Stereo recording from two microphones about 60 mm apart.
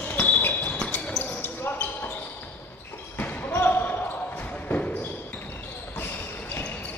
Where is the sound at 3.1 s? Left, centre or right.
Left.